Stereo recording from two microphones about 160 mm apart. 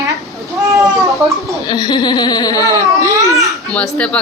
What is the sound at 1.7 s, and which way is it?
Speech, 25° left (ahead or behind).